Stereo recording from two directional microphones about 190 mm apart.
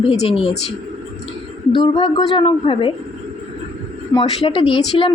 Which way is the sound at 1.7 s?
25° left (ahead or behind).